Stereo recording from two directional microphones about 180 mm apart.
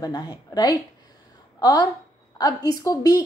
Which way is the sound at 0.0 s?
20° left (ahead or behind).